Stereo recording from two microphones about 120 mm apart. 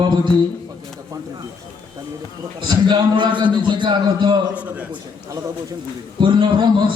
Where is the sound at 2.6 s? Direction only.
35° right (ahead or behind).